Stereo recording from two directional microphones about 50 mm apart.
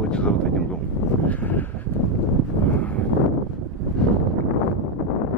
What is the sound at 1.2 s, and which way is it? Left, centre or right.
Speech, left.